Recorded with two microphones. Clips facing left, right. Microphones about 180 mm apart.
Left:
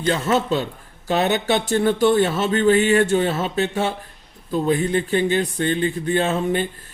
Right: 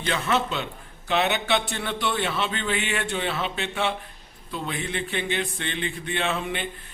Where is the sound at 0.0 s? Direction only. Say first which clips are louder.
Left 5 dB; 40° left (ahead or behind).